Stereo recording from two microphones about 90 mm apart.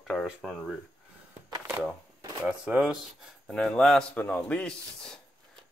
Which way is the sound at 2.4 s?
10° right (ahead or behind).